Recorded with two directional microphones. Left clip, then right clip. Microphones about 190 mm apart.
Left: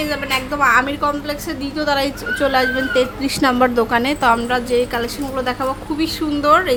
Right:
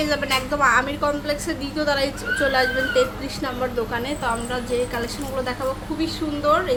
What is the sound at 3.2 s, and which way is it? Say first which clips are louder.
A woman's voice: left 11 dB; 40° left (ahead or behind).